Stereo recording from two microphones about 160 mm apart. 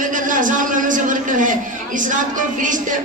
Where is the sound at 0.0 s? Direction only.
55° right (ahead or behind).